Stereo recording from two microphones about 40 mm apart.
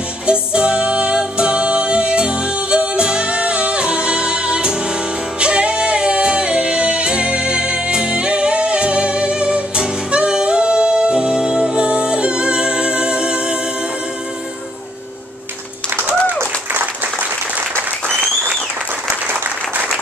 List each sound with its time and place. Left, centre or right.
0.3 s music: right